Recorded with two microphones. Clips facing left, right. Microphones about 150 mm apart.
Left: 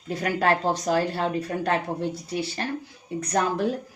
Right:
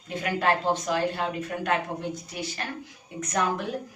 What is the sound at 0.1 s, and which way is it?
Speech, 40° left (ahead or behind).